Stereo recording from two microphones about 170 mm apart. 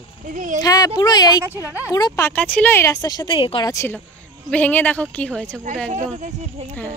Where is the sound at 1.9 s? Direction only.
20° left (ahead or behind).